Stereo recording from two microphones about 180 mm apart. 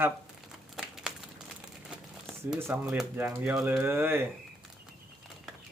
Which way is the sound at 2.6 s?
15° right (ahead or behind).